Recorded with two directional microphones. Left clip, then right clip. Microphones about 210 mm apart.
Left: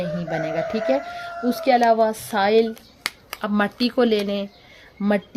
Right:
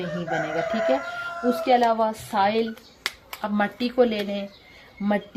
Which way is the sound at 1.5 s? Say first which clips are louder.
Left 3 dB; 55° left (ahead or behind).